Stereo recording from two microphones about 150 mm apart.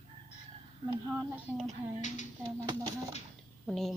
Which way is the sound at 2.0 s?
55° left (ahead or behind).